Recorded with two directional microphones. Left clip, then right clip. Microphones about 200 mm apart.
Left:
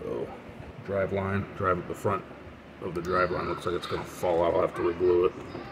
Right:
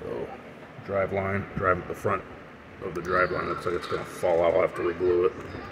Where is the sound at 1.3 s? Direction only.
10° left (ahead or behind).